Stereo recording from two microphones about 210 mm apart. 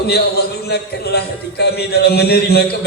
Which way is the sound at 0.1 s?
50° left (ahead or behind).